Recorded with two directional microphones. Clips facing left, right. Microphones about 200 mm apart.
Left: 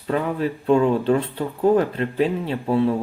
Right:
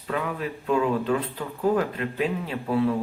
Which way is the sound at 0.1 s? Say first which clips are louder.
Left 6 dB; 30° left (ahead or behind).